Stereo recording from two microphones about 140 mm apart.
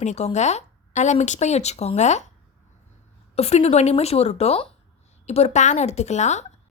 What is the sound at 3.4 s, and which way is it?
A woman's voice, 50° left (ahead or behind).